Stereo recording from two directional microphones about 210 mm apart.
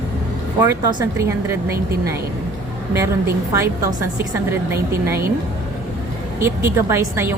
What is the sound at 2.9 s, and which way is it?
Speech, 15° right (ahead or behind).